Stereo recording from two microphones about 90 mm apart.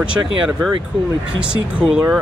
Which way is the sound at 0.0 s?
10° right (ahead or behind).